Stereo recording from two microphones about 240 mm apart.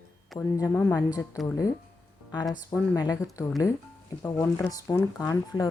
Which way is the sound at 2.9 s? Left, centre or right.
Centre.